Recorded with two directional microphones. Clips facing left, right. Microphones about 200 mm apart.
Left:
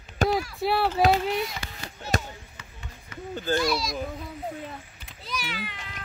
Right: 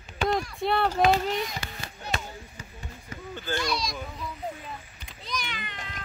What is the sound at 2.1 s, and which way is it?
Basketball bounce, 40° left (ahead or behind).